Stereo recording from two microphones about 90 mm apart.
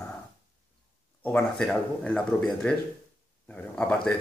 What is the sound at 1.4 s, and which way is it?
Speech, 5° left (ahead or behind).